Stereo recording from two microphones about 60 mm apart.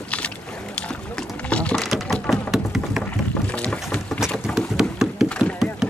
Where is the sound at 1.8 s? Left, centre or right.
Centre.